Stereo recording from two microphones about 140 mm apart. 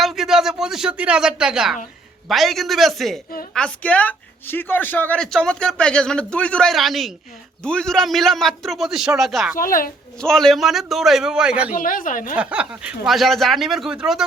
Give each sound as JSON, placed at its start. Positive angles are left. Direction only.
{"t": 0.0, "sound": "a man's voice", "side_deg": 0}
{"t": 9.6, "sound": "a child's voice", "side_deg": 85}
{"t": 10.2, "sound": "a man's voice", "side_deg": 5}
{"t": 11.7, "sound": "a woman's voice", "side_deg": 75}
{"t": 12.4, "sound": "a man's voice", "side_deg": -10}